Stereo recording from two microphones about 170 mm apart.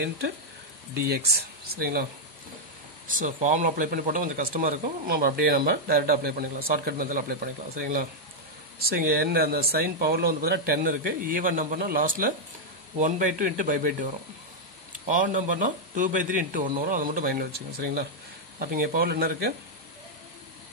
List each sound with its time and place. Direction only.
1.0 s speech: 70° right (ahead or behind)
3.1 s a man's voice: 50° right (ahead or behind)
15.0 s a man's voice: 50° right (ahead or behind)
18.6 s speech: 60° right (ahead or behind)